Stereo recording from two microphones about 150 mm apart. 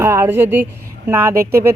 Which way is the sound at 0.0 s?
15° right (ahead or behind).